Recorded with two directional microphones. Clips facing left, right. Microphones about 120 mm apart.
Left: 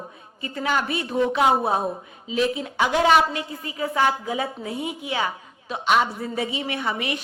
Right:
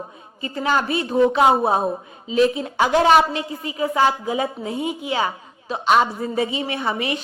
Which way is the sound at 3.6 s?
20° right (ahead or behind).